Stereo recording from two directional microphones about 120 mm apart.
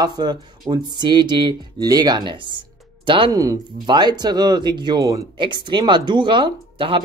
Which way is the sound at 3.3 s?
30° right (ahead or behind).